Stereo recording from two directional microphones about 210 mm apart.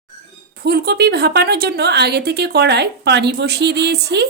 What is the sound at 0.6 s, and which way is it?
A woman's voice, 50° right (ahead or behind).